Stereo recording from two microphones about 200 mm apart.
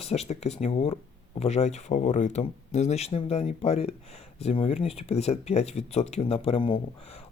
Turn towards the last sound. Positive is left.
turn(degrees=25)  # may be behind; listen again after turning